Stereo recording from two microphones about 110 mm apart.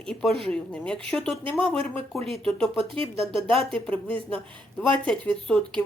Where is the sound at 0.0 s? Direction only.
5° left (ahead or behind).